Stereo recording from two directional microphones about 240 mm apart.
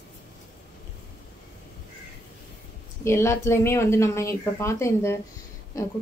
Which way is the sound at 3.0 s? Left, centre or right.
Centre.